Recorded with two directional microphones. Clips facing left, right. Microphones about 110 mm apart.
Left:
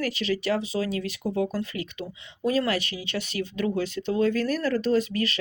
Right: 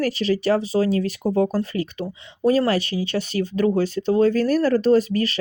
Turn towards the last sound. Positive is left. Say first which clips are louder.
# right 6 dB
turn(degrees=-35)  # may be behind; listen again after turning